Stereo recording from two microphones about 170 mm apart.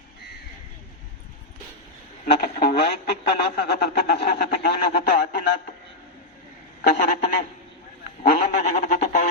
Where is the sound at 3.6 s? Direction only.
80° left.